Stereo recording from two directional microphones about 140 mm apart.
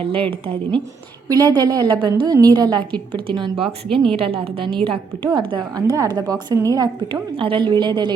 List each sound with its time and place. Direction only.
0.0 s a woman's voice: 40° right (ahead or behind)
1.3 s a woman's voice: 30° right (ahead or behind)